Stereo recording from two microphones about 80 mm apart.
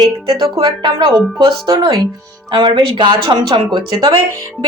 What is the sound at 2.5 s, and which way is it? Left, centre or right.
Speech, right.